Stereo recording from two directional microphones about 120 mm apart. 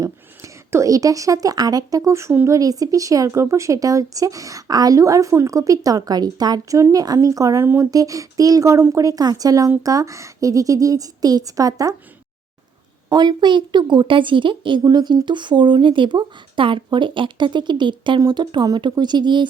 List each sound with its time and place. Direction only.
0.0 s a woman's voice: 25° right (ahead or behind)
13.1 s a woman's voice: 35° right (ahead or behind)